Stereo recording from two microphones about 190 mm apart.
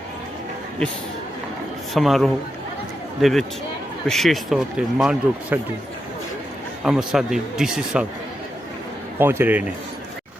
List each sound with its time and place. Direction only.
1.9 s speech: centre (ahead or behind)
6.8 s speech: centre (ahead or behind)
9.1 s a man's voice: 10° right (ahead or behind)